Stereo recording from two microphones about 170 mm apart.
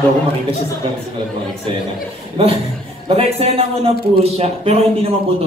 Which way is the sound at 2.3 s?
35° right (ahead or behind).